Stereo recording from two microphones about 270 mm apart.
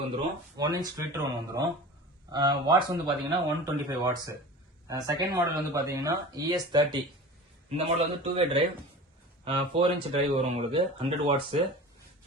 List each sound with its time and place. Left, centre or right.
0.2 s speech: centre